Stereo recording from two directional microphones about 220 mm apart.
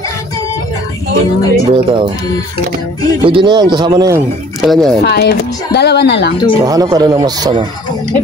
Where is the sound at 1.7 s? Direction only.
25° right (ahead or behind).